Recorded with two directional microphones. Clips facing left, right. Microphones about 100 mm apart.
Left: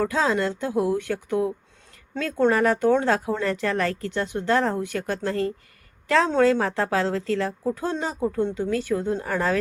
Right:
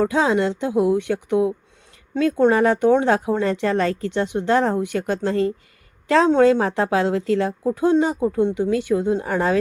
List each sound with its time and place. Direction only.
0.0 s a woman's voice: 20° right (ahead or behind)